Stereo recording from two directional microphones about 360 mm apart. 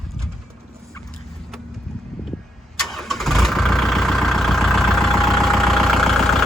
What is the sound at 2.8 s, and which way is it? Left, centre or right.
Vehicle, centre.